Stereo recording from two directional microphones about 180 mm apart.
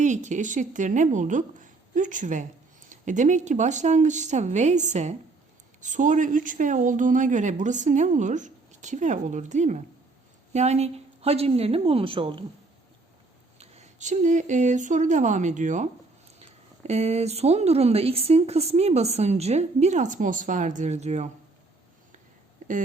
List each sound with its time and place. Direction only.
0.0 s speech: 40° right (ahead or behind)
13.6 s speech: 40° right (ahead or behind)